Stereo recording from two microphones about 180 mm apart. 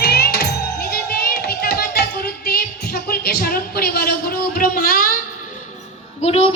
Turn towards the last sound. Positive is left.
turn(degrees=35)  # may be behind; listen again after turning